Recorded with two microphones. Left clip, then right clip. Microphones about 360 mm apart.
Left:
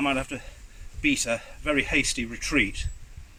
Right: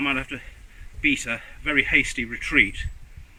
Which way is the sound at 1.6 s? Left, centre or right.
Centre.